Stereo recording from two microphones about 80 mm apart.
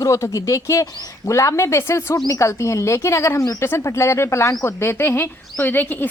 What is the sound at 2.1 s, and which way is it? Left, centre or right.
A woman's voice, left.